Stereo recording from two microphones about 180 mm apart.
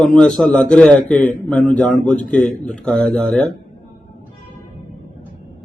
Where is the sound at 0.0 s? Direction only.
5° left (ahead or behind).